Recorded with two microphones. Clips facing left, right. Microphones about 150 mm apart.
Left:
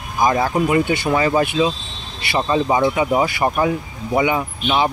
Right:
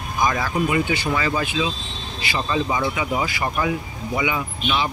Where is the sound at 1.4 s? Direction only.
55° left (ahead or behind).